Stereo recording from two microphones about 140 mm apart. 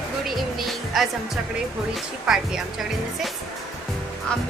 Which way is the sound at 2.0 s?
5° right (ahead or behind).